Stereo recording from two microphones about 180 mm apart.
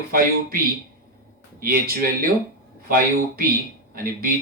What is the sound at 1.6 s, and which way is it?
A man's voice, 55° right (ahead or behind).